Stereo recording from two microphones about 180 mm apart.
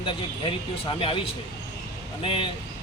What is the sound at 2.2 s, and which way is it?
Speech, 30° left (ahead or behind).